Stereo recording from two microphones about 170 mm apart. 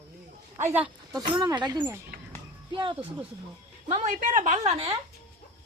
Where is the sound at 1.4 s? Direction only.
25° right (ahead or behind).